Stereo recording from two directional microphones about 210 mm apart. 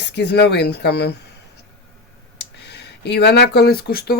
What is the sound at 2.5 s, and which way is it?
Speech, 55° left (ahead or behind).